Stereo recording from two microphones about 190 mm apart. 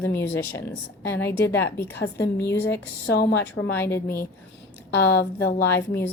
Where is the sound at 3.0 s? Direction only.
60° left (ahead or behind).